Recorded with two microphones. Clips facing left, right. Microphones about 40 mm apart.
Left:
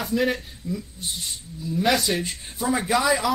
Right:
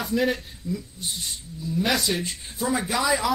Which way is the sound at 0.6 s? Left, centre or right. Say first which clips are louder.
Even; left.